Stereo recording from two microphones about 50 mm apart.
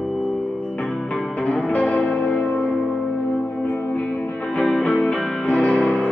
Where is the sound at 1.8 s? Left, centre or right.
Left.